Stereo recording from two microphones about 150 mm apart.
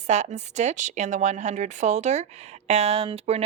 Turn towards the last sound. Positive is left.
turn(degrees=-45)  # may be behind; listen again after turning